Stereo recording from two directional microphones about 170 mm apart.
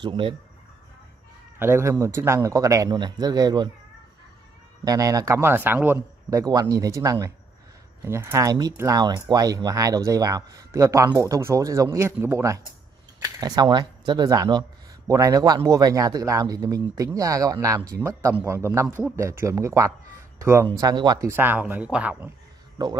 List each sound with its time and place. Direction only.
0.0 s speech: 30° right (ahead or behind)
1.6 s speech: 15° right (ahead or behind)
4.8 s speech: 20° right (ahead or behind)
21.3 s speech: 10° right (ahead or behind)
22.8 s speech: 25° right (ahead or behind)